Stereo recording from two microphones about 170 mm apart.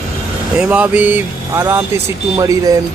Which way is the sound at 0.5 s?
5° right (ahead or behind).